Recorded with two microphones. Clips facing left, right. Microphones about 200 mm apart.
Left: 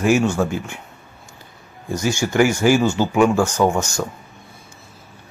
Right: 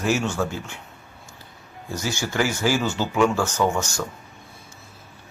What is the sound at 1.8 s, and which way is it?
Speech, 15° left (ahead or behind).